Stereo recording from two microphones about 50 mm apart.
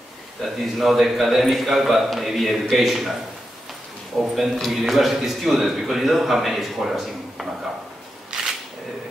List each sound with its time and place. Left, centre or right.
0.4 s a man's voice: centre
8.3 s single-lens reflex camera: centre